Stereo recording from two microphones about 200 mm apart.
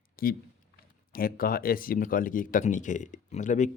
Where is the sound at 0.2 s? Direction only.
50° left (ahead or behind).